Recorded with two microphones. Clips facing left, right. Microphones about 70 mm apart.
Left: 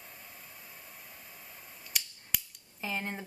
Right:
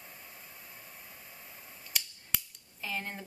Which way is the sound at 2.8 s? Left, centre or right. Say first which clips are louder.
Left 2 dB; left.